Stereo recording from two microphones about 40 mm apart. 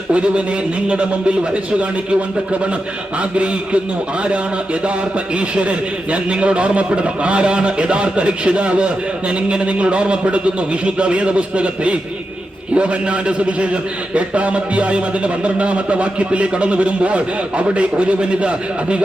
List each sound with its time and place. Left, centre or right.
0.1 s a man's voice: right